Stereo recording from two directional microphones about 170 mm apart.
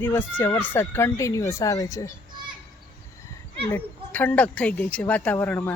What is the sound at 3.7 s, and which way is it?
Speech, 10° left (ahead or behind).